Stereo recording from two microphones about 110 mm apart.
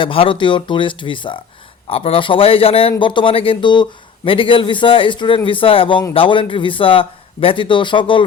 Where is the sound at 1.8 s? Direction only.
60° left (ahead or behind).